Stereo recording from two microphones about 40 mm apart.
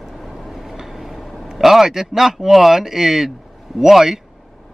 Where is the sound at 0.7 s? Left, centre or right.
Centre.